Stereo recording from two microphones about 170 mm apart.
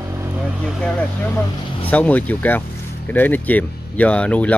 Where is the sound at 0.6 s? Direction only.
5° left (ahead or behind).